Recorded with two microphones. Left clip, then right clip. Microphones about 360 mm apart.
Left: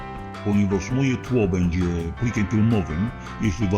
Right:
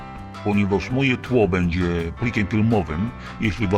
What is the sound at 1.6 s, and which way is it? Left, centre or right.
Speech, right.